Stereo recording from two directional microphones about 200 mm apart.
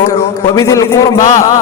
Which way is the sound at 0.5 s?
15° left (ahead or behind).